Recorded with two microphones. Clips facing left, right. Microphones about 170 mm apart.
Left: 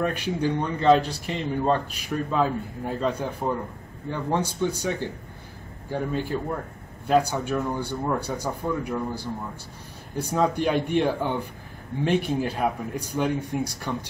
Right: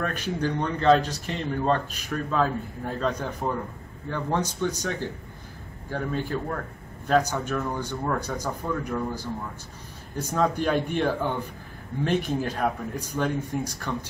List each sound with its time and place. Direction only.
0.0 s speech: 10° left (ahead or behind)